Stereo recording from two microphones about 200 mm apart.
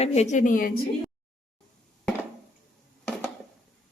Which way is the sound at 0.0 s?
35° left (ahead or behind).